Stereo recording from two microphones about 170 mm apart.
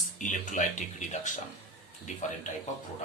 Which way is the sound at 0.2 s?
45° left (ahead or behind).